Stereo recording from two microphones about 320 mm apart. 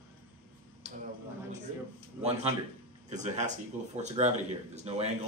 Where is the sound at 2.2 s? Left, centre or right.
Centre.